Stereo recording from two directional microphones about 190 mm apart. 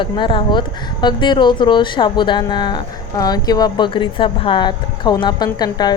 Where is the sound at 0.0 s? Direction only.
25° left (ahead or behind).